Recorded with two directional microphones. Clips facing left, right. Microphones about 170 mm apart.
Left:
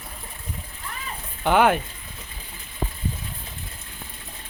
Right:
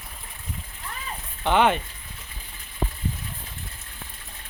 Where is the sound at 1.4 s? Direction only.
5° left (ahead or behind).